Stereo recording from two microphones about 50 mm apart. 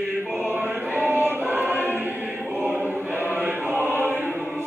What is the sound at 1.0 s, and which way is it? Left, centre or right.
Choir, right.